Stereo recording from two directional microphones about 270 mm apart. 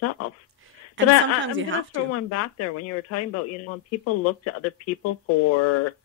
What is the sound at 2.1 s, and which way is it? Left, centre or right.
Speech, left.